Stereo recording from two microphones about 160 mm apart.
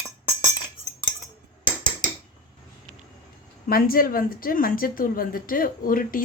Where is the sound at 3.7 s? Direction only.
65° left (ahead or behind).